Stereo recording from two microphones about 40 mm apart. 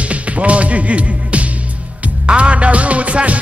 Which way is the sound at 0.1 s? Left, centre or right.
Right.